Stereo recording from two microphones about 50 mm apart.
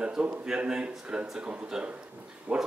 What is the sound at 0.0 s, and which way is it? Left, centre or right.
A man's voice, centre.